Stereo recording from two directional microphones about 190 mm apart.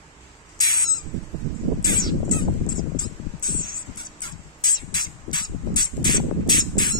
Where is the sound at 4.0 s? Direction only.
20° left (ahead or behind).